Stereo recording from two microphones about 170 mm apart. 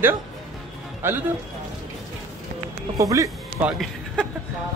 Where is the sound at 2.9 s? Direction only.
20° right (ahead or behind).